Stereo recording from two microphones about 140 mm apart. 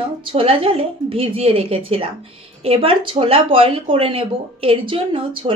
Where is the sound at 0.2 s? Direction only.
40° right (ahead or behind).